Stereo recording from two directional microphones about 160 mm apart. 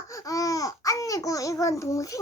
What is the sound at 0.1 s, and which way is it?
Babbling, 20° left (ahead or behind).